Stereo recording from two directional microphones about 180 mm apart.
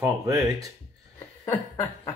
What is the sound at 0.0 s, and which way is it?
Speech, 20° right (ahead or behind).